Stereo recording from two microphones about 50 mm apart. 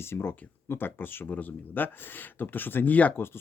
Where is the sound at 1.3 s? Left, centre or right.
Left.